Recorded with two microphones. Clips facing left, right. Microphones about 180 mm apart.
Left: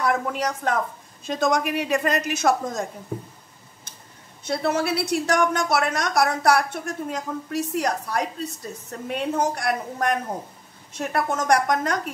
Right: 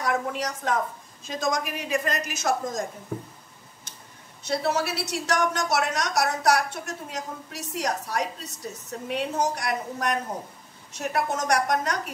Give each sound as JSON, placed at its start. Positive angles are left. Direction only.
{"t": 0.0, "sound": "a woman's voice", "side_deg": 60}
{"t": 4.4, "sound": "a woman's voice", "side_deg": 55}